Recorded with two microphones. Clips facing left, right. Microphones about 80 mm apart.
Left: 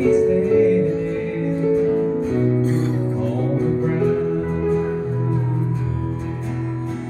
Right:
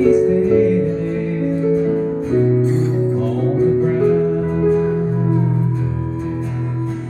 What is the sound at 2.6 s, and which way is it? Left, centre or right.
Music, left.